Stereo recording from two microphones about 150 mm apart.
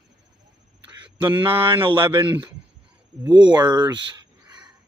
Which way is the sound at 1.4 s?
35° right (ahead or behind).